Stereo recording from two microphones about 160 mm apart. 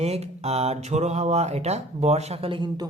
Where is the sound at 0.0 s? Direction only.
40° right (ahead or behind).